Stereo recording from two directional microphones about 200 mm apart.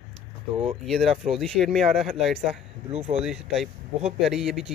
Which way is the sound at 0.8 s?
Centre (ahead or behind).